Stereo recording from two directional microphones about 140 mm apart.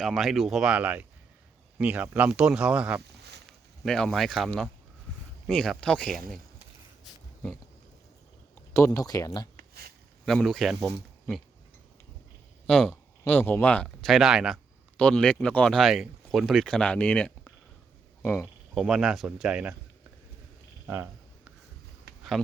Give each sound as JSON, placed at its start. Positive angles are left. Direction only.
{"t": 0.0, "sound": "speech", "side_deg": 0}
{"t": 3.8, "sound": "speech", "side_deg": 5}
{"t": 8.7, "sound": "speech", "side_deg": 20}
{"t": 9.6, "sound": "a sound", "side_deg": -90}
{"t": 10.2, "sound": "speech", "side_deg": 0}
{"t": 12.6, "sound": "speech", "side_deg": 5}
{"t": 14.9, "sound": "speech", "side_deg": 10}
{"t": 18.7, "sound": "speech", "side_deg": -5}
{"t": 20.8, "sound": "speech", "side_deg": -15}